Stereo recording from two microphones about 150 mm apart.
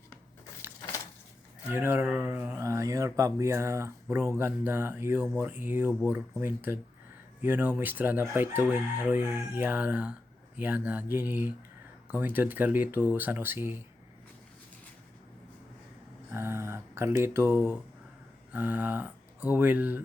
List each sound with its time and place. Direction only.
1.7 s speech: 15° right (ahead or behind)
16.3 s speech: 15° right (ahead or behind)